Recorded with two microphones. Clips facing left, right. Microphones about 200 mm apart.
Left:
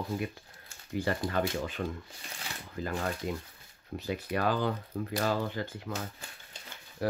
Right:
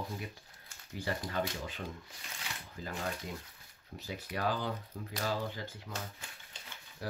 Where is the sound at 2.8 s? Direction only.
60° left (ahead or behind).